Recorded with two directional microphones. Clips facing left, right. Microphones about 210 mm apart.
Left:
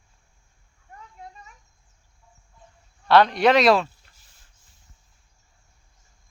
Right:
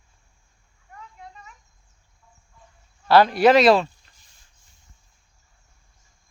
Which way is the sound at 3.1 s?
5° right (ahead or behind).